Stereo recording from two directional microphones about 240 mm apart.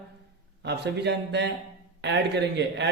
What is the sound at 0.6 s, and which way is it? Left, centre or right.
A man's voice, right.